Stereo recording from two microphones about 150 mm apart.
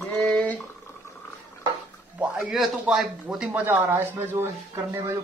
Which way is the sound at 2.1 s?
5° right (ahead or behind).